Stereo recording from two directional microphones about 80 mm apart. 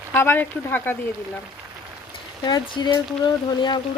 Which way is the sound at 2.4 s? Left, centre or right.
Left.